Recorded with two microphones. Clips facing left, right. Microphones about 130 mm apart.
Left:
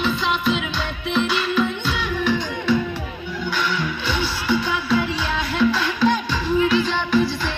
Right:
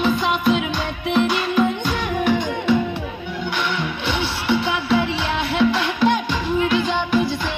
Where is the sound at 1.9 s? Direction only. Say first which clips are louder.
Right 2 dB; 50° right (ahead or behind).